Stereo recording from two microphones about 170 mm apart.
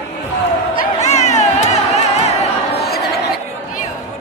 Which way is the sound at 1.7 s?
40° left (ahead or behind).